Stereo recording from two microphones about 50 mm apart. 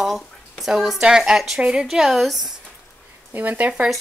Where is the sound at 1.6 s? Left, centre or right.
Centre.